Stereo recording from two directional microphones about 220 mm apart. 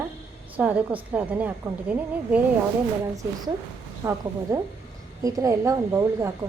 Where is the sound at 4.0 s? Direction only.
15° right (ahead or behind).